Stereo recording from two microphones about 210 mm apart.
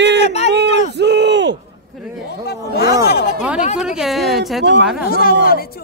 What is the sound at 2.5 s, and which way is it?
Speech, 50° left (ahead or behind).